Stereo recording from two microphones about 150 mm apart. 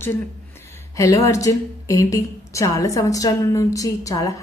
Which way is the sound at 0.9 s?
20° left (ahead or behind).